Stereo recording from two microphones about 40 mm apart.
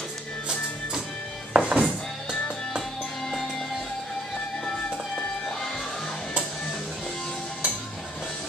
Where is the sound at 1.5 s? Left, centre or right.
Right.